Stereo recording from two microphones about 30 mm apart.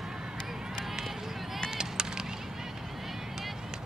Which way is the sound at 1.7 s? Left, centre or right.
Right.